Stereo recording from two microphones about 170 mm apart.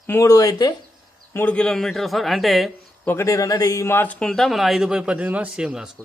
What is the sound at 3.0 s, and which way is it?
A man's voice, 15° left (ahead or behind).